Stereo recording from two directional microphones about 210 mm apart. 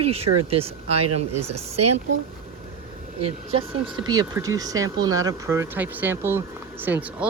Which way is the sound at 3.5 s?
25° right (ahead or behind).